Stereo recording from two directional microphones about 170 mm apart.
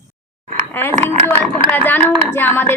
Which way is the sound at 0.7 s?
10° left (ahead or behind).